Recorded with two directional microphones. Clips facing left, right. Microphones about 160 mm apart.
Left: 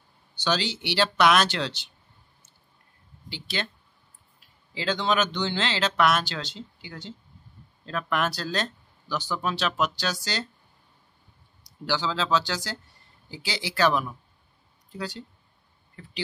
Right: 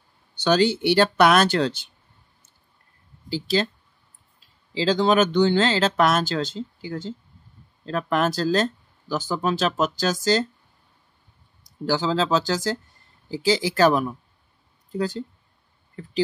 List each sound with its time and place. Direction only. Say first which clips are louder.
0.4 s speech: right 8 dB; 50° right (ahead or behind)
3.3 s speech: right 10 dB; 40° right (ahead or behind)
4.7 s speech: right 7 dB; 30° right (ahead or behind)
5.0 s speech: right 8 dB; 45° right (ahead or behind)
11.6 s speech: right 5 dB; 45° right (ahead or behind)